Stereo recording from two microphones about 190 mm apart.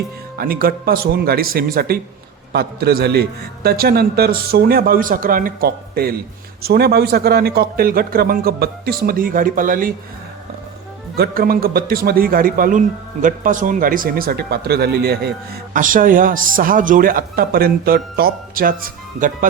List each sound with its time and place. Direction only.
0.3 s speech: 50° right (ahead or behind)
11.2 s speech: 50° right (ahead or behind)
15.7 s speech: 45° right (ahead or behind)